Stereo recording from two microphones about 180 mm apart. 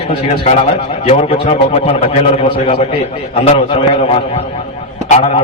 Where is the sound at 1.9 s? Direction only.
35° left (ahead or behind).